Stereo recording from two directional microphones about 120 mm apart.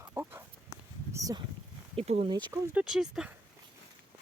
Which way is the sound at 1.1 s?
30° right (ahead or behind).